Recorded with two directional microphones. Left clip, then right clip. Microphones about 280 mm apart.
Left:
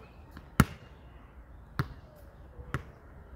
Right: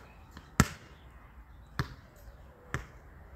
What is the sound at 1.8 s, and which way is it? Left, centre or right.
Basketball bounce, centre.